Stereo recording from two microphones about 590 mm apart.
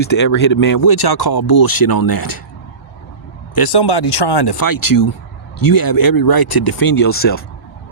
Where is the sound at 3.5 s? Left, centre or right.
Left.